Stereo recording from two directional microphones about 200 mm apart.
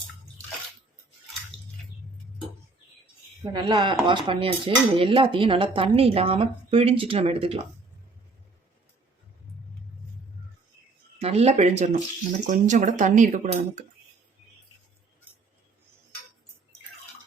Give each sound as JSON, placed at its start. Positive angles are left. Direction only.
{"t": 3.5, "sound": "speech", "side_deg": -25}
{"t": 11.2, "sound": "speech", "side_deg": -30}